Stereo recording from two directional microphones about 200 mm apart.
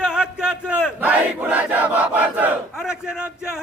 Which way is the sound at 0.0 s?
5° right (ahead or behind).